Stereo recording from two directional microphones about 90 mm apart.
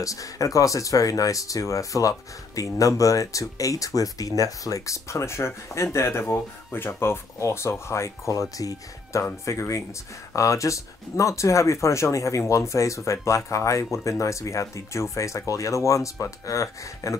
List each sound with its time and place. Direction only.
0.0 s speech: 40° left (ahead or behind)